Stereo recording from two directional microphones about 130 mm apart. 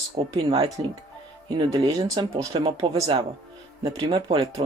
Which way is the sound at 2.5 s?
45° right (ahead or behind).